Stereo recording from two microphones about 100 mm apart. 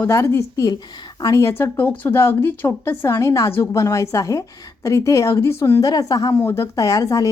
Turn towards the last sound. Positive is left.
turn(degrees=35)  # may be behind; listen again after turning